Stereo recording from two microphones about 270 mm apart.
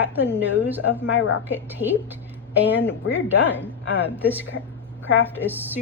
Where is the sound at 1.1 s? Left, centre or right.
Left.